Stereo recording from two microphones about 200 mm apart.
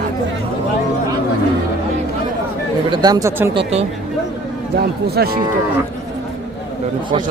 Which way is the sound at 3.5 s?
30° right (ahead or behind).